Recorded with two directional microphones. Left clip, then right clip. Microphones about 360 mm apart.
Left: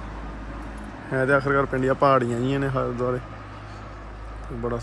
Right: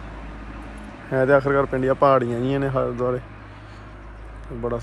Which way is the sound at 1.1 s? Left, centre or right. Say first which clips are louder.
Right 3 dB; centre.